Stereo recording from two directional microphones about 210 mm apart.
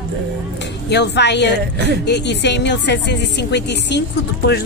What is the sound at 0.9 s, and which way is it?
Speech, 55° left (ahead or behind).